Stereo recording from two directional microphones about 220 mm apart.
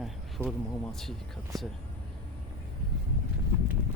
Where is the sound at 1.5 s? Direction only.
Centre (ahead or behind).